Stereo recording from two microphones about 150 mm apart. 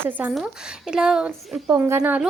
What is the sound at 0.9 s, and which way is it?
Speech, 5° right (ahead or behind).